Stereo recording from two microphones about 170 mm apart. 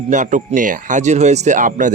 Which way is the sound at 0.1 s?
50° right (ahead or behind).